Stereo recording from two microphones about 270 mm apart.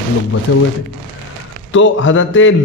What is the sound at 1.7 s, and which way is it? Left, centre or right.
Speech, left.